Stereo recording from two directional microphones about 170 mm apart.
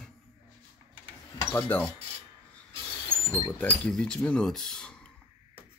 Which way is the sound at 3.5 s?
5° left (ahead or behind).